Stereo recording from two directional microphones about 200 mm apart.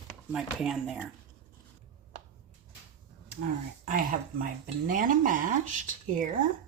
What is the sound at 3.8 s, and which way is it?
Speech, 40° right (ahead or behind).